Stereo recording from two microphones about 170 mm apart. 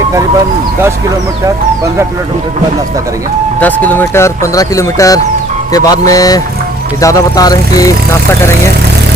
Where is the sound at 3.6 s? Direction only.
10° left (ahead or behind).